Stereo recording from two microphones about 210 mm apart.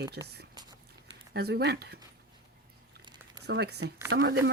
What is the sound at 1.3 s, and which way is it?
Speech, 50° right (ahead or behind).